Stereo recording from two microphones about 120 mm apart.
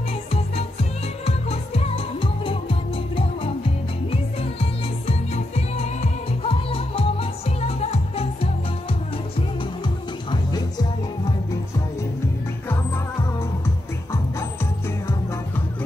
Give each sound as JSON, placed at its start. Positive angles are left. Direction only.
{"t": 1.2, "sound": "music", "side_deg": 60}
{"t": 5.0, "sound": "music", "side_deg": 70}